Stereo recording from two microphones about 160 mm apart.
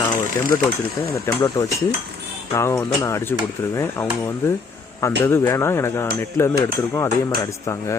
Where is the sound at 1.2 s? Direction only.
15° left (ahead or behind).